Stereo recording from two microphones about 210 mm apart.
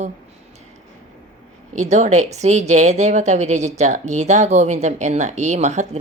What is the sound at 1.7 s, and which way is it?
A woman's voice, 35° right (ahead or behind).